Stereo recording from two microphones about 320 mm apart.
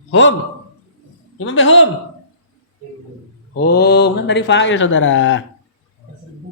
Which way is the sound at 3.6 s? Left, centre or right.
Left.